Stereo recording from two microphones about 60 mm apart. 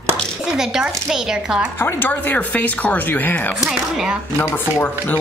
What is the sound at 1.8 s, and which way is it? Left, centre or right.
A woman's voice, left.